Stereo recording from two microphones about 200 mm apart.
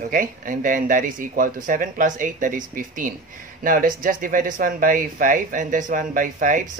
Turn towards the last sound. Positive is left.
turn(degrees=-40)  # may be behind; listen again after turning